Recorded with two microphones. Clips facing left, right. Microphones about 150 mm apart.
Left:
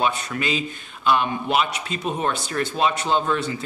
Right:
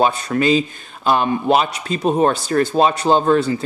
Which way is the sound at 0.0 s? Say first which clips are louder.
Right 7 dB; 35° right (ahead or behind).